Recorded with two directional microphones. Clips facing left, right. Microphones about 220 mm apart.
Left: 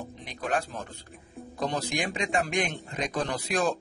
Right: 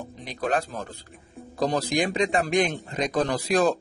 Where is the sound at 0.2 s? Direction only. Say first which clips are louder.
Right 4 dB; 35° right (ahead or behind).